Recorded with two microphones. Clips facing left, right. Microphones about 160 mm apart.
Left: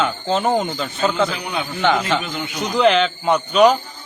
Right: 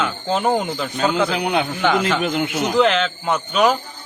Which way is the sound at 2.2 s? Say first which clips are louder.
Right 7 dB; 55° right (ahead or behind).